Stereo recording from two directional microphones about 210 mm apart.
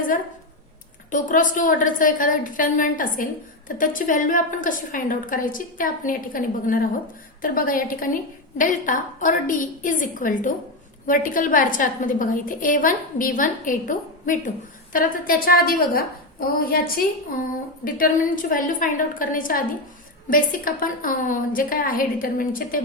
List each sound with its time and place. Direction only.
1.1 s a woman's voice: 40° left (ahead or behind)